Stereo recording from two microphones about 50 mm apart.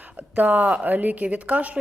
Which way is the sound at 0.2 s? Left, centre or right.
Right.